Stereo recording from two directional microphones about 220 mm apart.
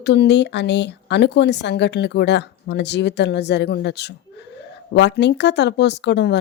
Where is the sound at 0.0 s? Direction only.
50° left (ahead or behind).